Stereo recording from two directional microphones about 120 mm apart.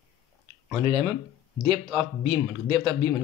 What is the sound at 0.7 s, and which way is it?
A man's voice, 40° right (ahead or behind).